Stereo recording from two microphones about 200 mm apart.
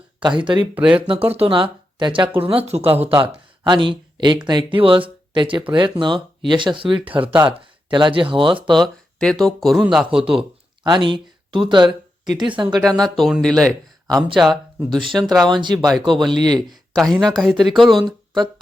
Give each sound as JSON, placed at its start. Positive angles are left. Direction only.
{"t": 0.2, "sound": "speech", "side_deg": -25}
{"t": 0.8, "sound": "speech", "side_deg": -5}
{"t": 1.0, "sound": "speech", "side_deg": -25}
{"t": 8.8, "sound": "speech", "side_deg": 0}
{"t": 10.8, "sound": "speech", "side_deg": -25}
{"t": 13.0, "sound": "speech", "side_deg": 0}
{"t": 14.8, "sound": "speech", "side_deg": -25}
{"t": 16.0, "sound": "speech", "side_deg": 0}
{"t": 16.2, "sound": "speech", "side_deg": -20}
{"t": 17.0, "sound": "speech", "side_deg": 0}